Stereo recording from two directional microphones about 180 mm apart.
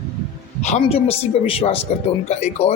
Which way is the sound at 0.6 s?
40° left (ahead or behind).